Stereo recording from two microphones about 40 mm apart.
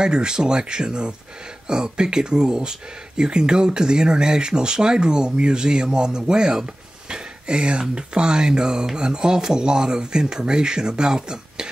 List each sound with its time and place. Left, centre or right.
0.0 s speech: right